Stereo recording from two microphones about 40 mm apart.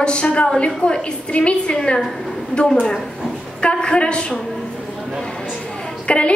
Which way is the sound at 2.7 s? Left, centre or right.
Centre.